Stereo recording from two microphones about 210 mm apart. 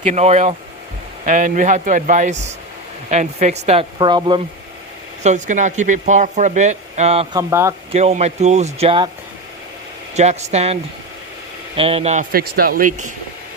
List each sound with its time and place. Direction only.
0.0 s a man's voice: 30° right (ahead or behind)
5.2 s a man's voice: 35° right (ahead or behind)
7.3 s speech: 15° right (ahead or behind)
7.9 s a man's voice: 30° right (ahead or behind)
10.2 s a man's voice: 30° right (ahead or behind)
11.8 s speech: 30° right (ahead or behind)
12.3 s speech: 45° right (ahead or behind)